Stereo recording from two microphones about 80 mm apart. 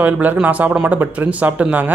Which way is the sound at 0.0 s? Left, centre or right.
Right.